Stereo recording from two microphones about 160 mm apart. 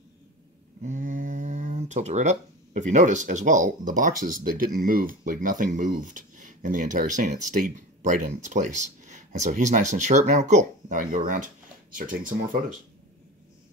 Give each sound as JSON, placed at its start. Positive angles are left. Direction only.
{"t": 0.8, "sound": "speech", "side_deg": -50}